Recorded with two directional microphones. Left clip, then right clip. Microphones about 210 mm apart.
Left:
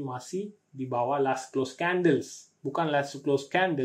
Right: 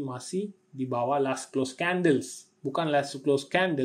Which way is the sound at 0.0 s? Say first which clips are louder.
Right 1 dB; 35° right (ahead or behind).